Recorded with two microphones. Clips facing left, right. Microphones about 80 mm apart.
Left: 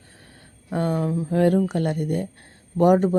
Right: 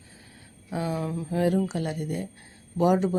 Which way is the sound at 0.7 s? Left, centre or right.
Left.